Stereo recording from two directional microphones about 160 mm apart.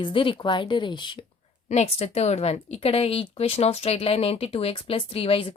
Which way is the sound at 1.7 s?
40° left (ahead or behind).